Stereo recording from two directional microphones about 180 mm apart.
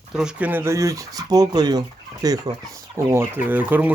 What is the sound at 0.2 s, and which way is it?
Speech, 5° right (ahead or behind).